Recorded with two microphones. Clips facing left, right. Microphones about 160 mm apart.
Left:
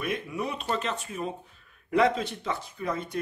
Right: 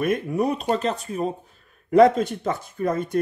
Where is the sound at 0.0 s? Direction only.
45° right (ahead or behind).